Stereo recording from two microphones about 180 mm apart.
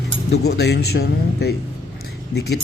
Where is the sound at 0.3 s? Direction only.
65° left (ahead or behind).